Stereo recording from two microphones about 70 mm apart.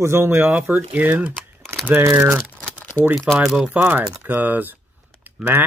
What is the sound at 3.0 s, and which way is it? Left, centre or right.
Speech, left.